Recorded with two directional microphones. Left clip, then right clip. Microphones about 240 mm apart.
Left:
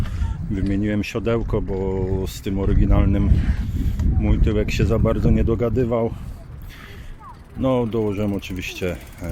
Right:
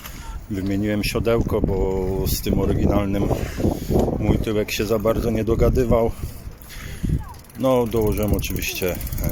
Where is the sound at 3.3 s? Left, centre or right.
Right.